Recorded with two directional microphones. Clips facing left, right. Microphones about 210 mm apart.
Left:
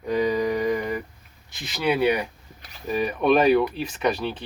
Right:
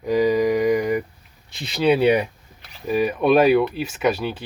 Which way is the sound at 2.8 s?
5° right (ahead or behind).